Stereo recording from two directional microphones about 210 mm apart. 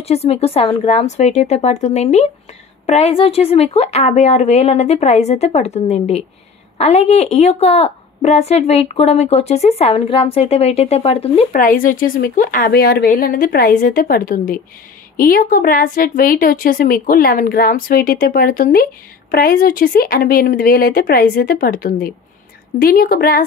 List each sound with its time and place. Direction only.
0.0 s a woman's voice: 30° left (ahead or behind)
11.5 s speech: 40° left (ahead or behind)